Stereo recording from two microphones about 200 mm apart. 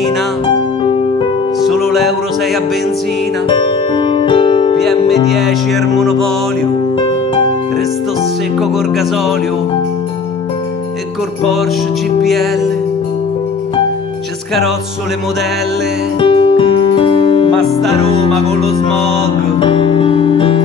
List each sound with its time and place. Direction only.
1.8 s music: centre (ahead or behind)
3.4 s music: 25° left (ahead or behind)
4.8 s music: centre (ahead or behind)
8.5 s music: centre (ahead or behind)
12.2 s music: centre (ahead or behind)
16.2 s music: 25° left (ahead or behind)
17.5 s music: centre (ahead or behind)
18.8 s music: 30° left (ahead or behind)